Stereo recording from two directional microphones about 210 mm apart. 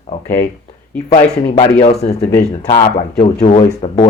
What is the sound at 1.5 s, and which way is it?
Speech, 30° left (ahead or behind).